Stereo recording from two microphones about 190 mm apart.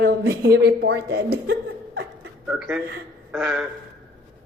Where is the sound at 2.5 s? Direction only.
5° right (ahead or behind).